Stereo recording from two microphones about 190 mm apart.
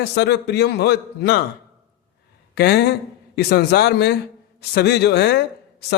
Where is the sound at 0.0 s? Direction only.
60° left (ahead or behind).